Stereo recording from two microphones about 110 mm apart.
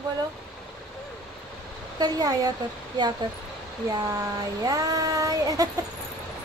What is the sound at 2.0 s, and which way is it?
Child singing, 35° right (ahead or behind).